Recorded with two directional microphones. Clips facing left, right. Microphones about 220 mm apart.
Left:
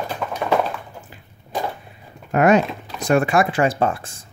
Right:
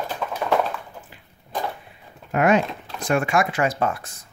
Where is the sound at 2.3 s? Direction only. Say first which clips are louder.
Left 3 dB; 40° left (ahead or behind).